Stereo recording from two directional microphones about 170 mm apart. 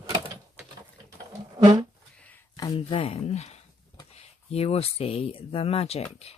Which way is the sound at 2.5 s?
25° left (ahead or behind).